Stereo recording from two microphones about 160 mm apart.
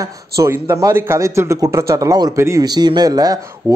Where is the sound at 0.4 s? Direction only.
15° right (ahead or behind).